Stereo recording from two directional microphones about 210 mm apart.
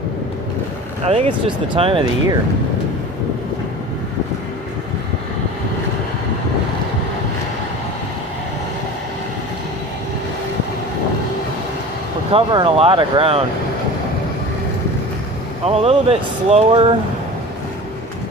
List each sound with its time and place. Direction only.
1.0 s speech: 25° right (ahead or behind)
12.3 s speech: 25° right (ahead or behind)
15.6 s speech: 30° right (ahead or behind)